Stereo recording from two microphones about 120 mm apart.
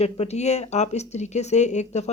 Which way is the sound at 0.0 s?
60° left (ahead or behind).